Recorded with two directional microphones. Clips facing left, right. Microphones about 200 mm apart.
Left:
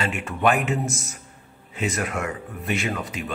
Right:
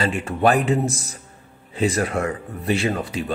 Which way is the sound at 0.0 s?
35° right (ahead or behind).